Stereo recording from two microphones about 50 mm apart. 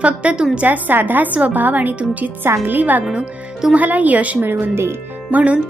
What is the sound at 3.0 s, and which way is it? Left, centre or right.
Speech, centre.